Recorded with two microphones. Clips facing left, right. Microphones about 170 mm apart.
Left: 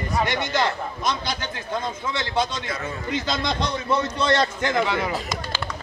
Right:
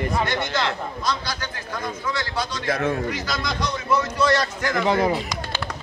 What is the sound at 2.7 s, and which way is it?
Speech, 65° right (ahead or behind).